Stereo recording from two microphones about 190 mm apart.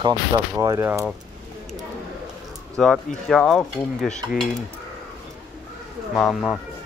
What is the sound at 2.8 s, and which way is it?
Cutlery, centre (ahead or behind).